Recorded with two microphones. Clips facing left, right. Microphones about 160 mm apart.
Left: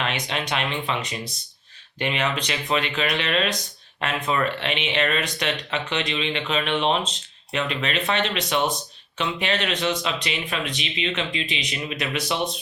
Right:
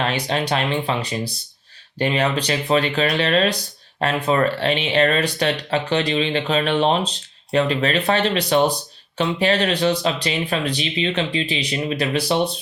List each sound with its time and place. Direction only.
0.0 s speech: 35° right (ahead or behind)